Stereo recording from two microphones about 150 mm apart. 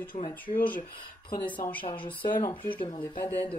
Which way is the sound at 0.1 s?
55° left (ahead or behind).